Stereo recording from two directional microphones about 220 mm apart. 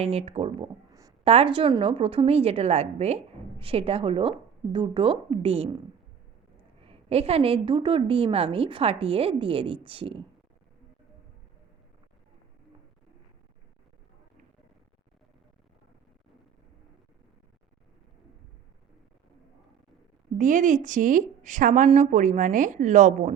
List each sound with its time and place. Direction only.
0.0 s a woman's voice: 30° right (ahead or behind)
0.9 s a sound: 15° right (ahead or behind)
1.3 s a woman's voice: 25° right (ahead or behind)
6.8 s a woman's voice: 25° right (ahead or behind)
20.4 s a woman's voice: 35° right (ahead or behind)